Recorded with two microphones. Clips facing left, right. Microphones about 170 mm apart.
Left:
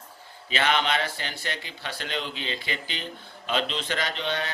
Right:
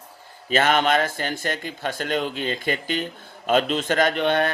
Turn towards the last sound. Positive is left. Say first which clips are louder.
# right 9 dB
turn(degrees=-55)  # may be behind; listen again after turning